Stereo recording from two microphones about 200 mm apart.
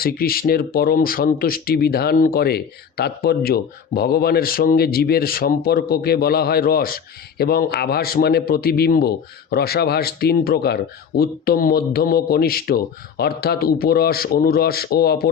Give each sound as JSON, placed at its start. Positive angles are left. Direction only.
{"t": 0.0, "sound": "speech", "side_deg": 50}